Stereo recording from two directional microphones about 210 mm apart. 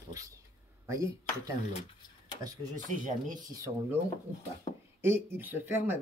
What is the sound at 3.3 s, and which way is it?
Speech, 15° right (ahead or behind).